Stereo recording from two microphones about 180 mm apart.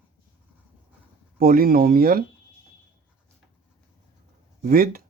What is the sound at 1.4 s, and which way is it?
Speech, 55° right (ahead or behind).